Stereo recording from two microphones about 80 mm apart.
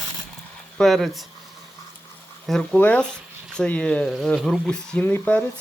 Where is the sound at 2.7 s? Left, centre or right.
Centre.